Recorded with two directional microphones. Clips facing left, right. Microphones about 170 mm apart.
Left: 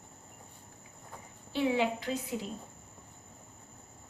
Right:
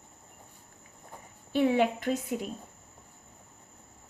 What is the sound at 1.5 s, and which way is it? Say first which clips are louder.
Speech: right 4 dB; 55° right (ahead or behind).